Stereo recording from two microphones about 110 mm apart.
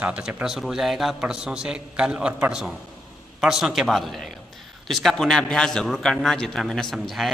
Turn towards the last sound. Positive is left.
turn(degrees=0)  # may be behind; listen again after turning